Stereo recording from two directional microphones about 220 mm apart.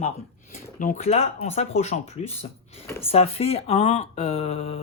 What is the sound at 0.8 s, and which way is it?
Speech, 35° left (ahead or behind).